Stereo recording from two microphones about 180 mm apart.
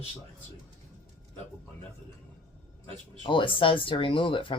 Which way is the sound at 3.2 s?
30° left (ahead or behind).